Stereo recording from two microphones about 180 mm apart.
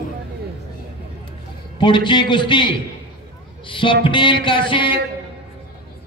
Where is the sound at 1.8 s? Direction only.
25° left (ahead or behind).